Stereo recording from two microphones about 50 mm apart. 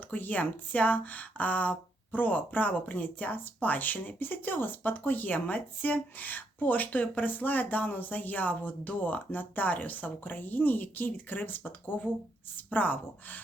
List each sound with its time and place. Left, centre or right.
0.1 s speech: left